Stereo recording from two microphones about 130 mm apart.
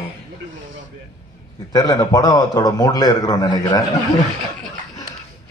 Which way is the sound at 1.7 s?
30° left (ahead or behind).